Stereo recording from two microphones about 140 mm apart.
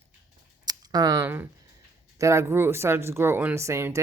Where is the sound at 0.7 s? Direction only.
25° right (ahead or behind).